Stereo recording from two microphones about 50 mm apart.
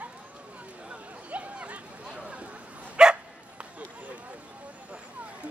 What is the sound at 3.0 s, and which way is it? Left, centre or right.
Dog, centre.